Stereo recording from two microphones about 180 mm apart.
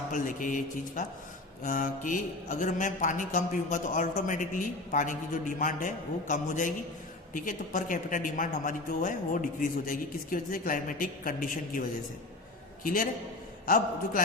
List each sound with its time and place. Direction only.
0.1 s mantra: 45° left (ahead or behind)
12.8 s a man's voice: 50° left (ahead or behind)
13.7 s mantra: 50° left (ahead or behind)